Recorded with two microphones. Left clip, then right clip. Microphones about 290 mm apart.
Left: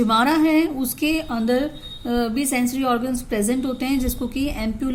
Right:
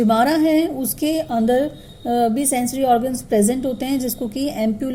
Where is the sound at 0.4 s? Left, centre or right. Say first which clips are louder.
Right 1 dB; centre.